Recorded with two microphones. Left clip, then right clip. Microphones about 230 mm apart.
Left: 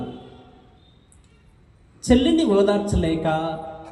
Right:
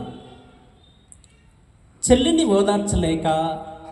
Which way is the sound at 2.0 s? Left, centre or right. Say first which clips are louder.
Right 1 dB; right.